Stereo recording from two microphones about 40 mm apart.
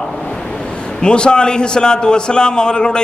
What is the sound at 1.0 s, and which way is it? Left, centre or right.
A man's voice, left.